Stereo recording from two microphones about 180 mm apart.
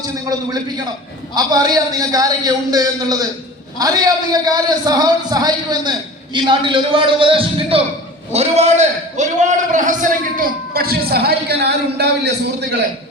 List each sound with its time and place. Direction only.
1.4 s a man's voice: 20° right (ahead or behind); by 12.3 s 65° right (ahead or behind)